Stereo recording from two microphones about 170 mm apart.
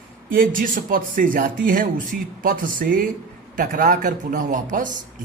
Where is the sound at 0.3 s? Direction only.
55° right (ahead or behind).